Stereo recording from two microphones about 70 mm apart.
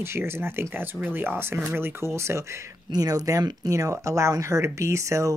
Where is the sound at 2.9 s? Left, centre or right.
Right.